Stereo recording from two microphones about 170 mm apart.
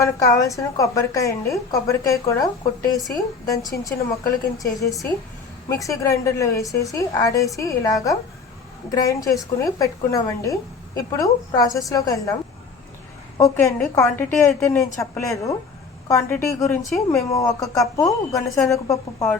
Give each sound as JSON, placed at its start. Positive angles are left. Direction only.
{"t": 0.0, "sound": "speech", "side_deg": 20}
{"t": 13.4, "sound": "a woman's voice", "side_deg": 20}